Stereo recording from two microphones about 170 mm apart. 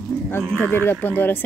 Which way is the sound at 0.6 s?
10° left (ahead or behind).